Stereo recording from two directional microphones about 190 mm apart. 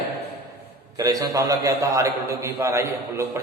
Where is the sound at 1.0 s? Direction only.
20° right (ahead or behind).